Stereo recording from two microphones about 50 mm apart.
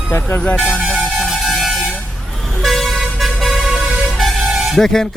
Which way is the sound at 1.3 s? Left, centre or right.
Centre.